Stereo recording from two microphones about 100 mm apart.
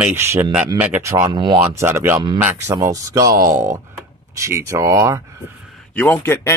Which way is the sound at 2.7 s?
35° right (ahead or behind).